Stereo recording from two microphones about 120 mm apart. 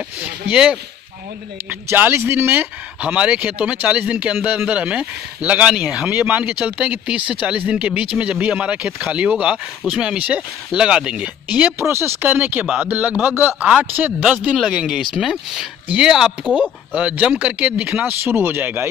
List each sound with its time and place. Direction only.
0.2 s speech: 10° right (ahead or behind)